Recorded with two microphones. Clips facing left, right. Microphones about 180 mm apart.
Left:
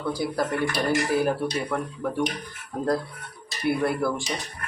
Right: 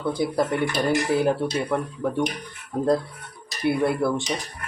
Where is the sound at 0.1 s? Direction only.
25° right (ahead or behind).